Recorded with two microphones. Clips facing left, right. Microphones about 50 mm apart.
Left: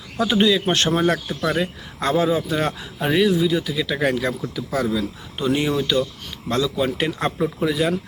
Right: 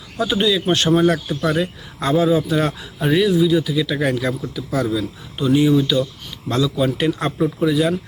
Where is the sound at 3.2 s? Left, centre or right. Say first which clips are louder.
Right 2 dB; left.